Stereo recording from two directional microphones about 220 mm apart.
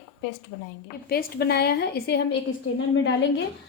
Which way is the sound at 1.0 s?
45° left (ahead or behind).